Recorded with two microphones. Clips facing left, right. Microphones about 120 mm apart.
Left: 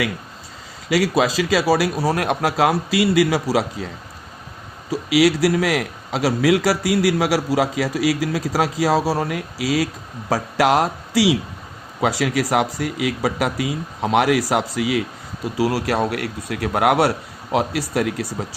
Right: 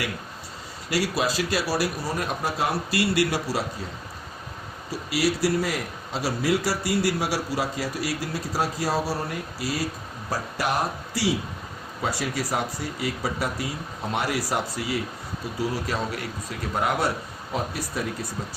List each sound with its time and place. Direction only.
0.9 s a man's voice: 90° left
5.0 s a man's voice: 90° left; by 17.1 s 70° left (ahead or behind)
17.5 s speech: 85° left